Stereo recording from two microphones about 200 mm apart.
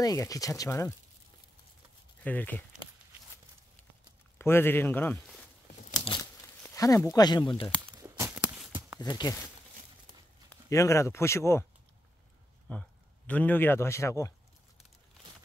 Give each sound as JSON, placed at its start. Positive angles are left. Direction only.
{"t": 0.0, "sound": "speech", "side_deg": 15}
{"t": 2.2, "sound": "speech", "side_deg": 10}
{"t": 4.4, "sound": "speech", "side_deg": 10}
{"t": 6.0, "sound": "crumpling", "side_deg": 20}
{"t": 6.6, "sound": "speech", "side_deg": 15}
{"t": 7.9, "sound": "a sound", "side_deg": -15}
{"t": 9.0, "sound": "speech", "side_deg": 20}
{"t": 10.5, "sound": "speech", "side_deg": 15}
{"t": 12.7, "sound": "speech", "side_deg": 10}